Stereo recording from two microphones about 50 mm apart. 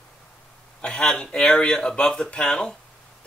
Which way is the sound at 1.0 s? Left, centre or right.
Centre.